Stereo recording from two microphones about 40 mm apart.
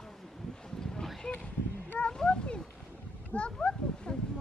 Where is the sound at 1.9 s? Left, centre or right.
Left.